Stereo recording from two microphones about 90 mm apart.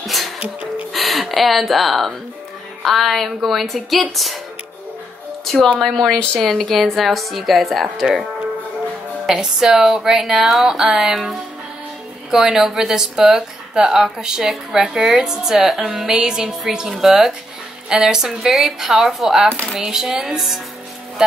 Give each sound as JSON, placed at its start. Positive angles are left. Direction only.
{"t": 0.0, "sound": "music", "side_deg": 0}
{"t": 0.9, "sound": "a woman's voice", "side_deg": 0}
{"t": 5.4, "sound": "a sound", "side_deg": 0}
{"t": 6.0, "sound": "a woman's voice", "side_deg": 5}